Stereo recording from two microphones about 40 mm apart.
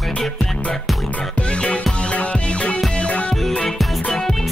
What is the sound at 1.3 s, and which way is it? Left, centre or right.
Music, left.